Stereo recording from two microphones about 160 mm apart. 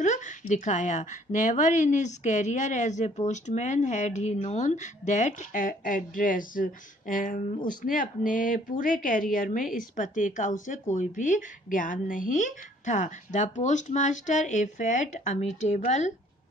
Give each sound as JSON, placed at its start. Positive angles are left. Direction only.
{"t": 0.0, "sound": "a woman's voice", "side_deg": 50}